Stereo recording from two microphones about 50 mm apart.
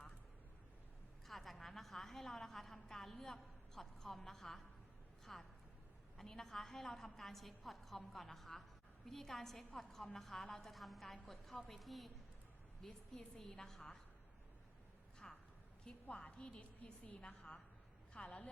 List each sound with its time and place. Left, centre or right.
1.3 s a woman's voice: centre
12.8 s a woman's voice: centre
15.2 s a sound: centre
16.0 s a woman's voice: left